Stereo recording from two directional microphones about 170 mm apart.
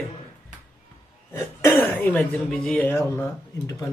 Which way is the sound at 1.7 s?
10° left (ahead or behind).